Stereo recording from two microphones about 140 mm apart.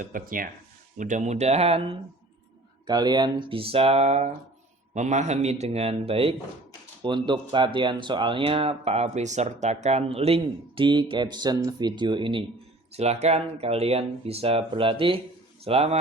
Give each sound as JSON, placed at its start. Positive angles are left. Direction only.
{"t": 0.0, "sound": "speech", "side_deg": -80}
{"t": 0.9, "sound": "speech", "side_deg": -65}
{"t": 2.8, "sound": "speech", "side_deg": -30}
{"t": 12.9, "sound": "speech", "side_deg": -50}